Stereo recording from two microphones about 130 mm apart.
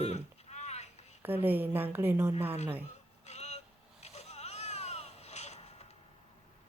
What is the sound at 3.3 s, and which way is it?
Vehicle, 60° left (ahead or behind).